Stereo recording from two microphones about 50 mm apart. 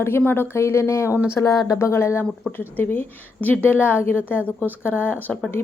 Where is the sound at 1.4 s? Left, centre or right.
Left.